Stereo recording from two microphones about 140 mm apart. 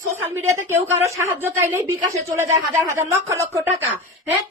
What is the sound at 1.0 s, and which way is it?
Speech, 15° right (ahead or behind).